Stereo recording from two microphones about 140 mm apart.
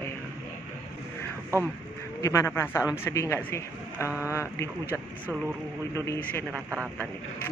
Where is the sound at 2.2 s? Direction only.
20° left (ahead or behind).